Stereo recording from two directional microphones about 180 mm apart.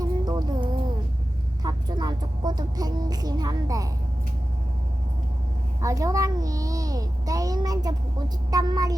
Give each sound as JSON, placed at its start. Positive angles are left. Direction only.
{"t": 0.0, "sound": "music", "side_deg": -20}
{"t": 1.6, "sound": "a woman's voice", "side_deg": -25}
{"t": 5.8, "sound": "a woman's voice", "side_deg": -20}